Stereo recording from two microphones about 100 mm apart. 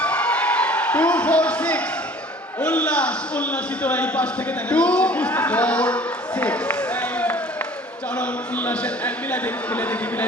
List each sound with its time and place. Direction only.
0.0 s a sound: 10° left (ahead or behind)
2.6 s a man's voice: 15° left (ahead or behind)
8.2 s a man's voice: 15° left (ahead or behind)